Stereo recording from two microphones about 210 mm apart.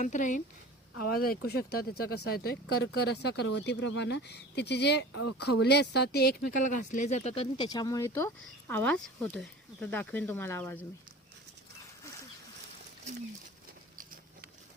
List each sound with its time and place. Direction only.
0.0 s speech: 35° left (ahead or behind)
7.7 s speech: 15° left (ahead or behind)
13.9 s a sound: 40° right (ahead or behind)